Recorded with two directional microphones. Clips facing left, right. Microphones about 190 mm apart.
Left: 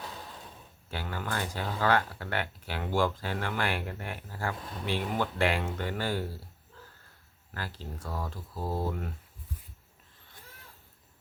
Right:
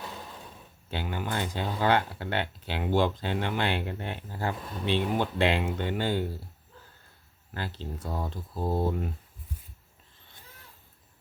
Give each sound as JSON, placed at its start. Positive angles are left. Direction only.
{"t": 0.9, "sound": "speech", "side_deg": -20}
{"t": 7.5, "sound": "speech", "side_deg": -25}